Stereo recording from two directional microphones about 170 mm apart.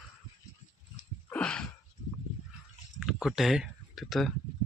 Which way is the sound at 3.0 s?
Centre (ahead or behind).